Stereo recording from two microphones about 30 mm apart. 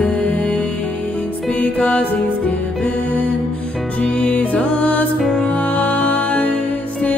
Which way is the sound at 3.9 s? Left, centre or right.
Left.